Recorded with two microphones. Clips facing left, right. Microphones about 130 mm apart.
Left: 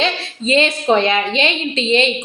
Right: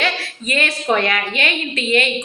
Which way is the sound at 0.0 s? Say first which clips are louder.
Left 3 dB; 20° left (ahead or behind).